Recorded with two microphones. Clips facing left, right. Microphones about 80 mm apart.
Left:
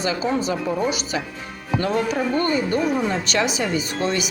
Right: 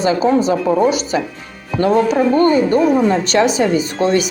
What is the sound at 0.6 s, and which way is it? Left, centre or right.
Speech, right.